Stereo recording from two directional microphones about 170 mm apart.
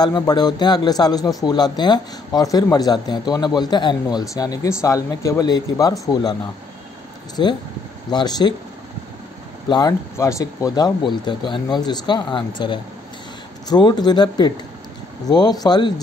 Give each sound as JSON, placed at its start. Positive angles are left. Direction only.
{"t": 0.0, "sound": "a man's voice", "side_deg": 25}
{"t": 8.1, "sound": "a man's voice", "side_deg": 25}
{"t": 9.7, "sound": "a man's voice", "side_deg": 25}